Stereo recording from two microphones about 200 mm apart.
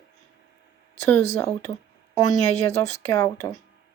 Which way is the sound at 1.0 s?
10° left (ahead or behind).